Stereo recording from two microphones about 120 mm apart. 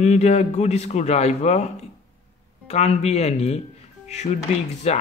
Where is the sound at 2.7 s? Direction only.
60° left (ahead or behind).